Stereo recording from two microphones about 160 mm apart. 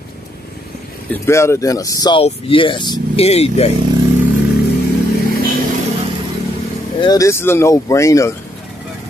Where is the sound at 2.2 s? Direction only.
35° left (ahead or behind).